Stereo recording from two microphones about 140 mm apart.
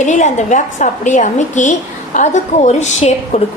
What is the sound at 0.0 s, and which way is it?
A woman's voice, 60° left (ahead or behind).